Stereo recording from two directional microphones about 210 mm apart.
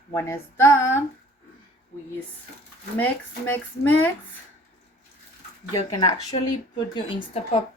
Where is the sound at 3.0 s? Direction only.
10° left (ahead or behind).